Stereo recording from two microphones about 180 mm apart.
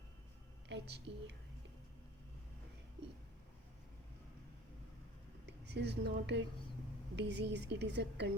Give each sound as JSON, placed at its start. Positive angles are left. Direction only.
{"t": 0.7, "sound": "a woman's voice", "side_deg": -75}
{"t": 5.5, "sound": "a woman's voice", "side_deg": -70}